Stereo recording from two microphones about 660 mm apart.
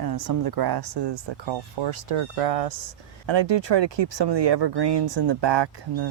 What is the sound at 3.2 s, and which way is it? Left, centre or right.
Speech, right.